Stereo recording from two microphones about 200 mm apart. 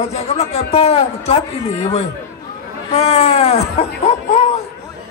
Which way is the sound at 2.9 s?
30° left (ahead or behind).